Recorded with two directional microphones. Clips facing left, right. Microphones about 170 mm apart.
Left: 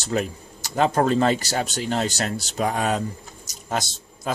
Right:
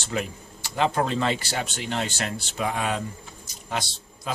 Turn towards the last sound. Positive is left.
turn(degrees=40)  # may be behind; listen again after turning